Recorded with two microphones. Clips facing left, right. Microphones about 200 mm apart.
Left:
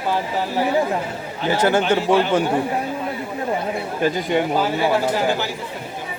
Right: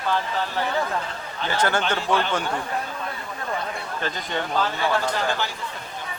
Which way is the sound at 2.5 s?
15° left (ahead or behind).